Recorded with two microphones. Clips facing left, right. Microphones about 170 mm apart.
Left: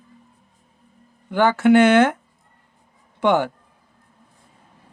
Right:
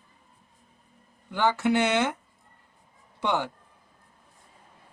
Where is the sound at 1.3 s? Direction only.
55° left (ahead or behind).